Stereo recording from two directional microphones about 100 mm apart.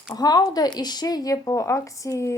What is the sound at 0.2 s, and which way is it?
A woman's voice, 40° left (ahead or behind).